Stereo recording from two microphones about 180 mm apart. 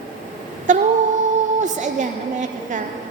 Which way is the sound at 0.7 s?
45° right (ahead or behind).